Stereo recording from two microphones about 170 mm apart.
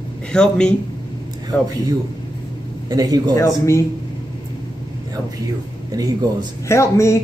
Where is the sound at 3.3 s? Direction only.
15° left (ahead or behind).